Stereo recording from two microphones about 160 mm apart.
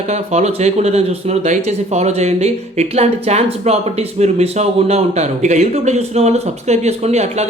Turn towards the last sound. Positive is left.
turn(degrees=-45)  # may be behind; listen again after turning